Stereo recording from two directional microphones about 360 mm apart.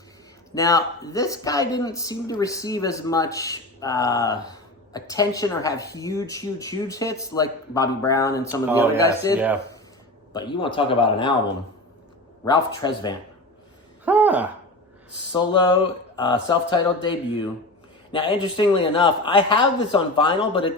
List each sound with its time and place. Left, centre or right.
0.5 s speech: centre
8.6 s speech: centre
9.0 s speech: centre
9.3 s speech: centre
10.3 s speech: centre
12.5 s speech: centre
14.0 s a sound: centre
15.3 s speech: centre